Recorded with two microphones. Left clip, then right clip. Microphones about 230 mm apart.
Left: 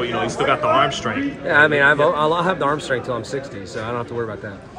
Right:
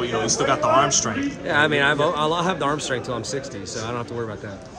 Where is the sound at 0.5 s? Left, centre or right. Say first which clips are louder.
Left 1 dB; centre.